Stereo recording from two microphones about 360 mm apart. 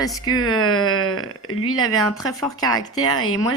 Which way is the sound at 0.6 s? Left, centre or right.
Left.